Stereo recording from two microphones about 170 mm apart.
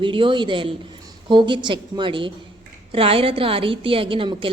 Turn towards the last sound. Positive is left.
turn(degrees=-30)  # may be behind; listen again after turning